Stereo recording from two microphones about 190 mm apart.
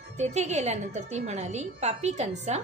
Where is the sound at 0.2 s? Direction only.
35° right (ahead or behind).